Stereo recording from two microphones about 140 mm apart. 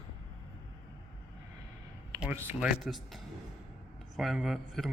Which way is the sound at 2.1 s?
15° right (ahead or behind).